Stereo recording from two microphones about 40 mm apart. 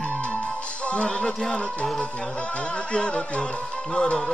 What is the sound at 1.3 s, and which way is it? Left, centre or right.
Speech, centre.